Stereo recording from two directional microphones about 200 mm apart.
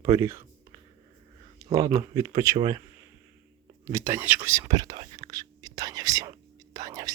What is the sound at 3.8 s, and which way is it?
Speech, 15° right (ahead or behind).